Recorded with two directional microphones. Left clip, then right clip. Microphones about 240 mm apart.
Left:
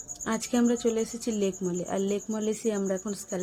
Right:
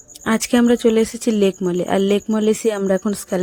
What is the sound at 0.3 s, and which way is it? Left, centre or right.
Speech, right.